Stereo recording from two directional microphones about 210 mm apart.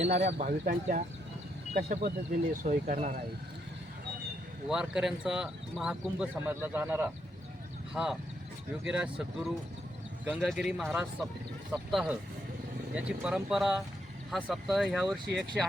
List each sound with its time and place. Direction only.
0.0 s speech: 35° right (ahead or behind)
4.7 s speech: 5° right (ahead or behind)